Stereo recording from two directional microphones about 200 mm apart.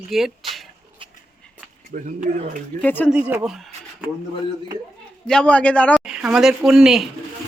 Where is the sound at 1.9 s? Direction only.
45° right (ahead or behind).